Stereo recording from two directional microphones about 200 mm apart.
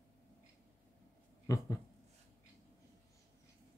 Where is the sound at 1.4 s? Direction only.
15° left (ahead or behind).